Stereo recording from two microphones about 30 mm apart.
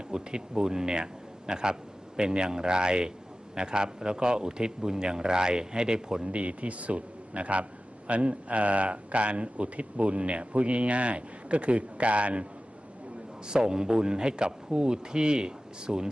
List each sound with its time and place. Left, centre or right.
0.1 s a man's voice: right
6.2 s a man's voice: right
13.5 s a man's voice: right